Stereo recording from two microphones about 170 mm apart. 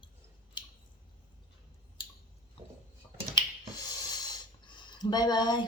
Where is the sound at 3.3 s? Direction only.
25° left (ahead or behind).